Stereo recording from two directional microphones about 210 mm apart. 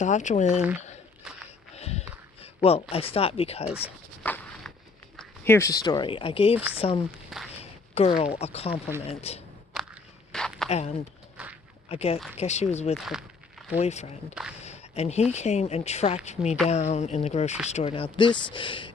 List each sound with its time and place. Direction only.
0.0 s speech: 35° left (ahead or behind)
1.7 s a sound: 30° left (ahead or behind)
2.9 s speech: 25° left (ahead or behind)
4.2 s walk: 5° left (ahead or behind)
5.1 s speech: 5° left (ahead or behind); by 7.0 s 25° left (ahead or behind)
7.6 s a sound: 30° left (ahead or behind)
8.4 s speech: 30° left (ahead or behind)
9.7 s walk: centre (ahead or behind)
10.7 s speech: 30° left (ahead or behind)
11.4 s a sound: 5° right (ahead or behind)
11.9 s speech: 30° left (ahead or behind)
13.0 s a sound: centre (ahead or behind)
13.7 s speech: 30° left (ahead or behind)